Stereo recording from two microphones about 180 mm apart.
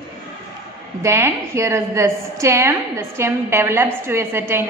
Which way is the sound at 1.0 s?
15° right (ahead or behind).